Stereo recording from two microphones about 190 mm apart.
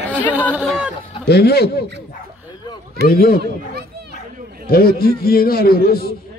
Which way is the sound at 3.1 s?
50° left (ahead or behind).